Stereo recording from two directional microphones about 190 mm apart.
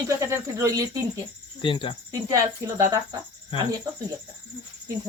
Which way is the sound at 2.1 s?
15° right (ahead or behind).